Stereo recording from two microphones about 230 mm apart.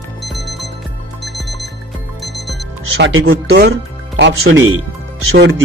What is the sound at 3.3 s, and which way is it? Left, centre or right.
Speech, right.